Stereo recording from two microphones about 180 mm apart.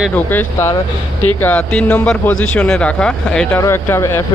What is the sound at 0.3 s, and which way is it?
Speech, 10° left (ahead or behind).